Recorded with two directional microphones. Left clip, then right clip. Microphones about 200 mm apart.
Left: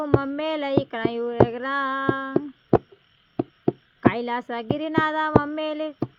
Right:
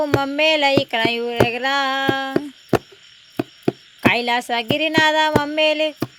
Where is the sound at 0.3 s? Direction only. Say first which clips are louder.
Right 9 dB; 10° left (ahead or behind).